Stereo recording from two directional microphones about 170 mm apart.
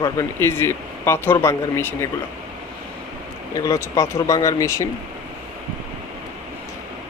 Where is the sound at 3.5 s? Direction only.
20° left (ahead or behind).